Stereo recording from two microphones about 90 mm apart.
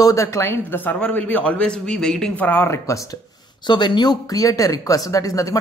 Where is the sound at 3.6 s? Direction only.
55° left (ahead or behind).